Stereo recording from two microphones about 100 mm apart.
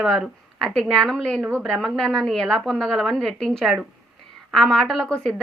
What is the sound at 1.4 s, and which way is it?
Speech, 20° right (ahead or behind).